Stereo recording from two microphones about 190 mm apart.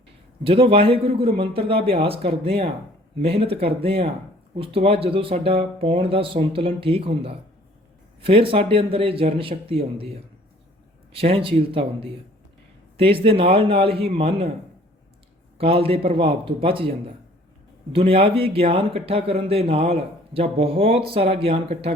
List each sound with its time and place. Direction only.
0.4 s speech: 30° right (ahead or behind)
15.5 s speech: 30° right (ahead or behind)
18.1 s speech: 30° right (ahead or behind)